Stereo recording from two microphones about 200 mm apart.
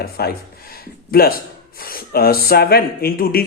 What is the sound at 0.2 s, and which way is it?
A man's voice, 50° left (ahead or behind).